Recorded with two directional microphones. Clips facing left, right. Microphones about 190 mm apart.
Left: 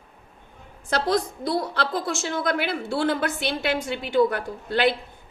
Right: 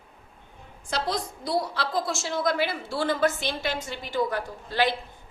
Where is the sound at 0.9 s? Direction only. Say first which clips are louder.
Left 6 dB; 55° left (ahead or behind).